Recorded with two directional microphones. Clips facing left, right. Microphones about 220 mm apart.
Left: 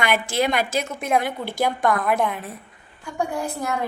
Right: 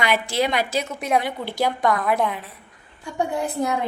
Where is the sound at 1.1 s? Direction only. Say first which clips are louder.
Even; centre (ahead or behind).